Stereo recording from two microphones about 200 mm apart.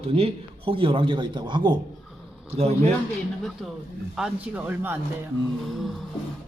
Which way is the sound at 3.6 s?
Centre (ahead or behind).